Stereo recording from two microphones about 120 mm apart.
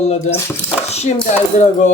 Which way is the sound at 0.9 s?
65° left (ahead or behind).